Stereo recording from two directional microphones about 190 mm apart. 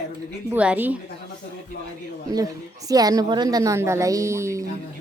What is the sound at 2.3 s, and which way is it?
A woman's voice, 20° right (ahead or behind).